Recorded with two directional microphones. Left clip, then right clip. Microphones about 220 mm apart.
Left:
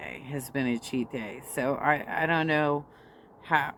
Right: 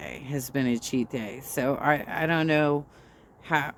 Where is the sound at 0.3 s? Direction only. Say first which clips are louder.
Right 3 dB; 45° right (ahead or behind).